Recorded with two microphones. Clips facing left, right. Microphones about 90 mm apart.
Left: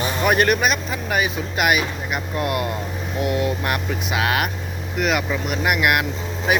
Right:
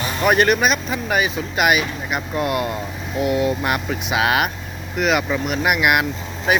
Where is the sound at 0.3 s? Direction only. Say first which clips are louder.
Right 2 dB; centre (ahead or behind).